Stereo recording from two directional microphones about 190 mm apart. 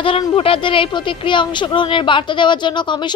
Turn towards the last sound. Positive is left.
turn(degrees=25)  # may be behind; listen again after turning